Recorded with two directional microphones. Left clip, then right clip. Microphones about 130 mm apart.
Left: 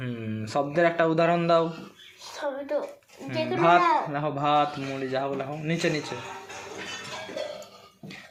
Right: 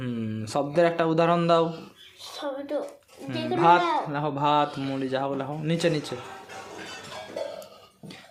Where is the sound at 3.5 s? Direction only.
30° right (ahead or behind).